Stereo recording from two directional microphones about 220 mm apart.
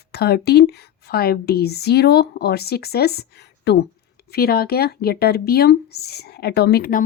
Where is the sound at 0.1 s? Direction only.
45° left (ahead or behind).